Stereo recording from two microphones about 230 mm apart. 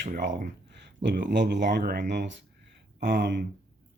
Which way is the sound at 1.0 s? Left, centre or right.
Right.